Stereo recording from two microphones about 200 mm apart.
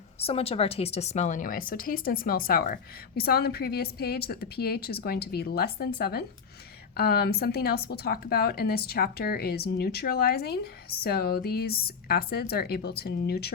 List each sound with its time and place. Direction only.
0.2 s speech: 30° left (ahead or behind); by 13.5 s 50° left (ahead or behind)